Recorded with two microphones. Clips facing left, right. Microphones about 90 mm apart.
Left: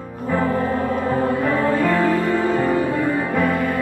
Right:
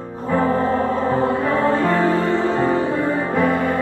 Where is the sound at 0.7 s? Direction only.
35° right (ahead or behind).